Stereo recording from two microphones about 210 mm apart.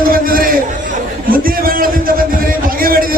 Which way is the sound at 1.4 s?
45° right (ahead or behind).